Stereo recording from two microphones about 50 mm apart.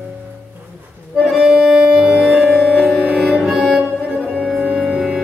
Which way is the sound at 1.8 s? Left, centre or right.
Right.